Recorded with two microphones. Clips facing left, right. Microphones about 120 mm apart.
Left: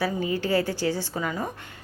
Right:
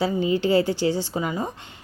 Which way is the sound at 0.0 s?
20° right (ahead or behind).